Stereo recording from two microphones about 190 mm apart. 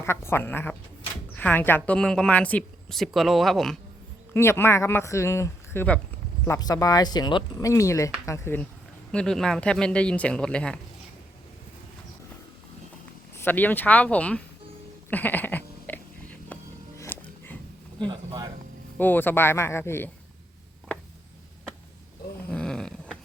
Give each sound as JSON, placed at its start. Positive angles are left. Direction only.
{"t": 0.0, "sound": "a woman's voice", "side_deg": 15}
{"t": 4.4, "sound": "a woman's voice", "side_deg": 15}
{"t": 13.3, "sound": "speech", "side_deg": 10}
{"t": 15.1, "sound": "a sound", "side_deg": 10}
{"t": 17.0, "sound": "music", "side_deg": 10}
{"t": 18.0, "sound": "a man's voice", "side_deg": -25}
{"t": 18.9, "sound": "speech", "side_deg": 10}
{"t": 22.4, "sound": "grunt", "side_deg": 5}